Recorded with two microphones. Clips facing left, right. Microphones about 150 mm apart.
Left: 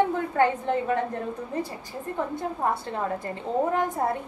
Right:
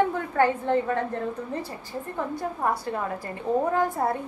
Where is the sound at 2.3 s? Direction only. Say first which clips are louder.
Right 2 dB; 25° left (ahead or behind).